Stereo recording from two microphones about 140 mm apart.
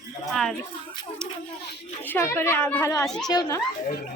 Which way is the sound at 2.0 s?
15° left (ahead or behind).